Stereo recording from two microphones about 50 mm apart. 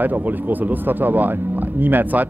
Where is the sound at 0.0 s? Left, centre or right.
Right.